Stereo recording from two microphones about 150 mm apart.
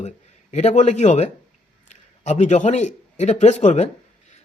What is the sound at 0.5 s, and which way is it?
A man's voice, 50° left (ahead or behind).